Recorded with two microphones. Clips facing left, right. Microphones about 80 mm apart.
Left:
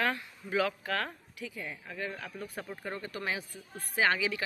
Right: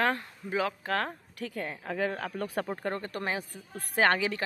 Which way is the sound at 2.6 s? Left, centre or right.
Right.